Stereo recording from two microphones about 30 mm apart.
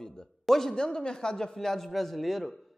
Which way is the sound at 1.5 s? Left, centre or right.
Centre.